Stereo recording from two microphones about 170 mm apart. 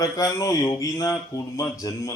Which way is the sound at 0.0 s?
20° left (ahead or behind).